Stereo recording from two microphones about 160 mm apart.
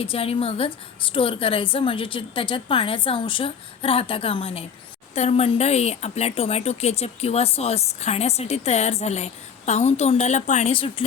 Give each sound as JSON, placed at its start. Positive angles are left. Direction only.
{"t": 0.0, "sound": "speech", "side_deg": 35}